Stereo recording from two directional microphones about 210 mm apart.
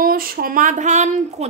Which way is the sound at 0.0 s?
45° right (ahead or behind).